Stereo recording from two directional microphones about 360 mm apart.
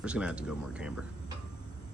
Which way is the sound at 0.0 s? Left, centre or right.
Centre.